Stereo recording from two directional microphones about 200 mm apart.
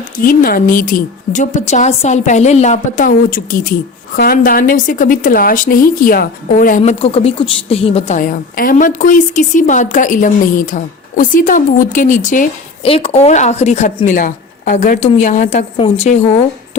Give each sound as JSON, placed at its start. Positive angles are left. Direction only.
{"t": 0.2, "sound": "a woman's voice", "side_deg": 45}
{"t": 12.8, "sound": "a woman's voice", "side_deg": 30}